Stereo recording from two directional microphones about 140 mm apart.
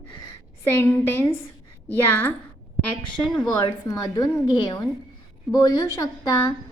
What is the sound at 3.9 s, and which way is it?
A woman's voice, 30° left (ahead or behind).